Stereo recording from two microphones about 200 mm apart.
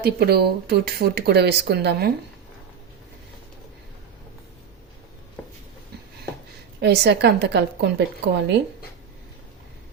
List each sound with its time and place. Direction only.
0.0 s speech: 50° right (ahead or behind)
6.7 s a woman's voice: 60° right (ahead or behind)